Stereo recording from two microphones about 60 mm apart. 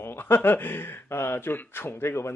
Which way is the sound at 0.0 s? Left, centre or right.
Left.